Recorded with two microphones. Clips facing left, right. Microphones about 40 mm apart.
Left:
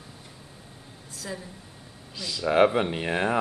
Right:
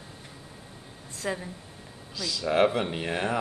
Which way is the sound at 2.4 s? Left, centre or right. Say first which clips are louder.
Left 3 dB; centre.